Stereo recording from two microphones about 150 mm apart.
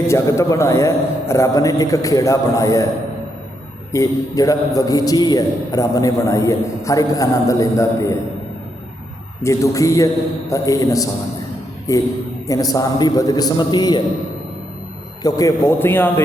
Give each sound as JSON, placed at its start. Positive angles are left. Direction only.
{"t": 0.1, "sound": "a man's voice", "side_deg": 20}
{"t": 3.9, "sound": "a man's voice", "side_deg": 20}
{"t": 9.4, "sound": "a man's voice", "side_deg": 20}
{"t": 15.2, "sound": "a man's voice", "side_deg": 25}